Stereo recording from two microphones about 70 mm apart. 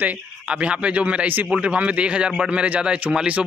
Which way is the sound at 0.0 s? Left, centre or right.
Right.